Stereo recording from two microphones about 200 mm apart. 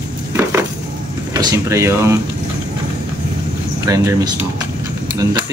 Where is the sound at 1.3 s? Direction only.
15° right (ahead or behind).